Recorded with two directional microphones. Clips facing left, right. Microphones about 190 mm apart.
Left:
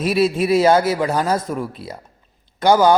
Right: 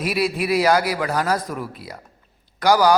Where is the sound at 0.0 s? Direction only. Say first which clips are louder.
Left 5 dB; 25° left (ahead or behind).